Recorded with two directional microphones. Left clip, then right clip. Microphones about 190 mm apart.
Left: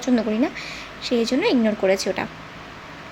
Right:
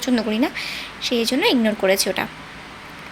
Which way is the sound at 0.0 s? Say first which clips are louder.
Right 1 dB; 5° left (ahead or behind).